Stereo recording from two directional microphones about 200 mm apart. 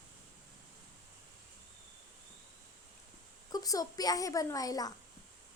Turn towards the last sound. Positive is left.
turn(degrees=20)  # may be behind; listen again after turning